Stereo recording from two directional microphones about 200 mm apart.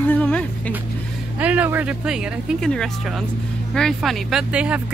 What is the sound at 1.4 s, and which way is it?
Speech, 5° right (ahead or behind).